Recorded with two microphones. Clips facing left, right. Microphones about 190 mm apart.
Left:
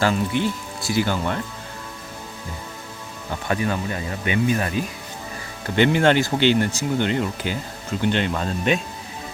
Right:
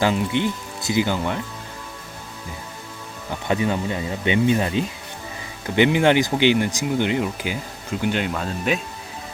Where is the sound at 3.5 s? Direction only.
20° right (ahead or behind); by 8.8 s centre (ahead or behind).